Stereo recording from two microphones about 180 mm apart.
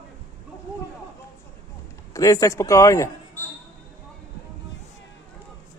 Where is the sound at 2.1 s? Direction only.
20° left (ahead or behind).